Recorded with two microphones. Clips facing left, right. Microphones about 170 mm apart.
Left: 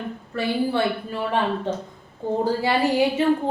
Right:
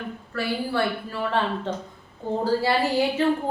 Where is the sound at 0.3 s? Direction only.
20° left (ahead or behind).